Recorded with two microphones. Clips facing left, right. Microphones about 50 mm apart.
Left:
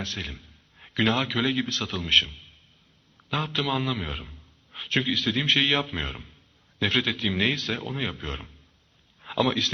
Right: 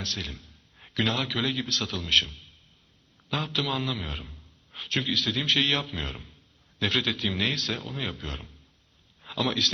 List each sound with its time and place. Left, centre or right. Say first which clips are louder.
0.0 s a man's voice: left 1 dB; centre